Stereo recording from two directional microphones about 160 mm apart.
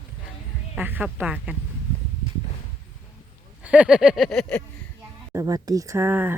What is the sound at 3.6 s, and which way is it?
Speech, 10° right (ahead or behind).